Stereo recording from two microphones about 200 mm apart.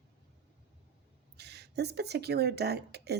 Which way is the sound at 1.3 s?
55° right (ahead or behind).